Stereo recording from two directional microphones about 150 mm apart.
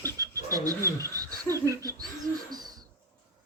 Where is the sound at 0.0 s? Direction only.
25° right (ahead or behind).